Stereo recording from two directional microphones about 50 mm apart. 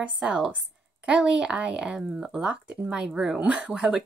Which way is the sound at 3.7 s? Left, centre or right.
Centre.